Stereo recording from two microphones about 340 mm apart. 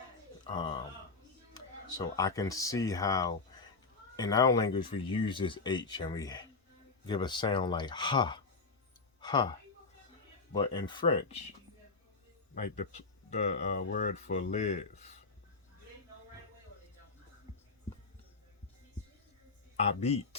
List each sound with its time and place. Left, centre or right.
0.4 s speech: centre
12.5 s speech: left
19.7 s speech: centre